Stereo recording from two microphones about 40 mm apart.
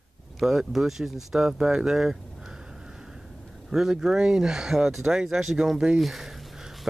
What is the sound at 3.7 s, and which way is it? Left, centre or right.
Speech, centre.